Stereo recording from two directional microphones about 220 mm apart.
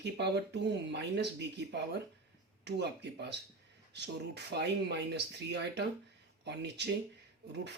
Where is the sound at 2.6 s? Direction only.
50° right (ahead or behind).